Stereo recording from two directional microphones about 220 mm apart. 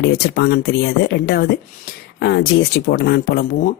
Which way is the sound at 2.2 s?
50° left (ahead or behind).